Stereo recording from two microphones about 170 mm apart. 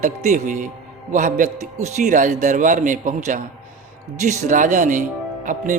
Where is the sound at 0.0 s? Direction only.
45° right (ahead or behind).